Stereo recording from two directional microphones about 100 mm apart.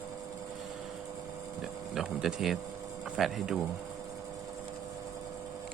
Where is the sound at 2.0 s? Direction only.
5° right (ahead or behind).